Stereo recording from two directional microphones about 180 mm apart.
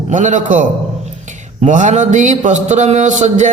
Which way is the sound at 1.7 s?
45° right (ahead or behind).